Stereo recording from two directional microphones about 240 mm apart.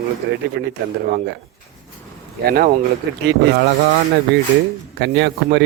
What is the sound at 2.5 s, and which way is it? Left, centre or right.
Speech, right.